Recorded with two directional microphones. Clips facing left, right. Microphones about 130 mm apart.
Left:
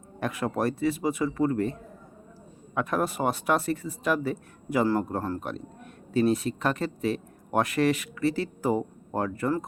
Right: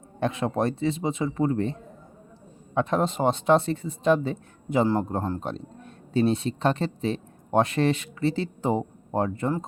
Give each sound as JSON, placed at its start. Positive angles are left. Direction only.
{"t": 0.2, "sound": "speech", "side_deg": -25}